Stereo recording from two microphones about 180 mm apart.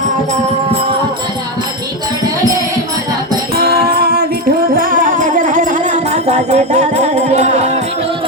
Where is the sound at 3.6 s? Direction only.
60° right (ahead or behind); by 7.8 s 40° right (ahead or behind).